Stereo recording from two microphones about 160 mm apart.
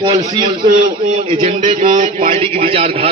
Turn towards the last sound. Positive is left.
turn(degrees=-35)  # may be behind; listen again after turning